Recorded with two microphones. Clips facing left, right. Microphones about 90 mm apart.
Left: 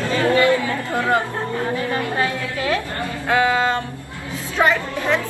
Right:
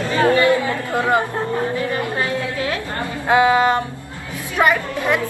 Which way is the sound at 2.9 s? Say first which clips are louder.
Right 6 dB; 20° right (ahead or behind).